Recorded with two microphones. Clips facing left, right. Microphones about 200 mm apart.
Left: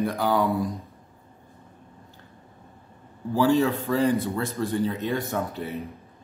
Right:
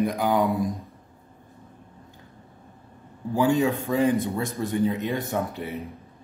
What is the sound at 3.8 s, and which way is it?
Speech, 20° right (ahead or behind).